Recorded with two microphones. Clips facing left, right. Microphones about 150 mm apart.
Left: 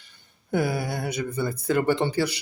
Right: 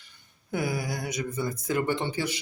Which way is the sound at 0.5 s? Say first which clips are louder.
Left 4 dB; 30° left (ahead or behind).